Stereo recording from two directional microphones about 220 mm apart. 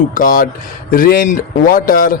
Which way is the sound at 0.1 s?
40° left (ahead or behind).